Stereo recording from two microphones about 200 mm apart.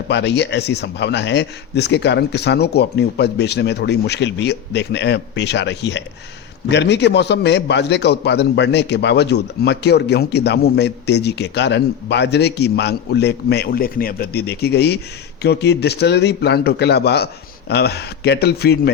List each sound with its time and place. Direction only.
0.1 s a man's voice: 60° left (ahead or behind)